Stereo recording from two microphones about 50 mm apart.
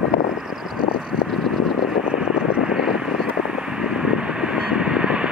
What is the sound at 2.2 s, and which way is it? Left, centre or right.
Vehicle, centre.